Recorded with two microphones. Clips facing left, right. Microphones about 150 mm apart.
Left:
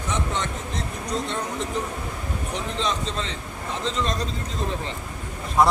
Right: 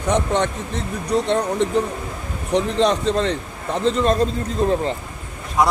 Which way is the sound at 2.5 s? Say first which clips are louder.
Right 11 dB; 65° right (ahead or behind).